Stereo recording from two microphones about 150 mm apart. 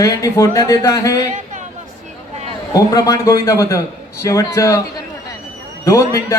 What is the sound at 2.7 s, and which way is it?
Speech, 25° left (ahead or behind).